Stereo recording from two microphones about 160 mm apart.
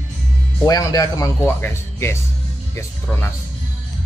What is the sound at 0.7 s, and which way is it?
Speech, 25° left (ahead or behind).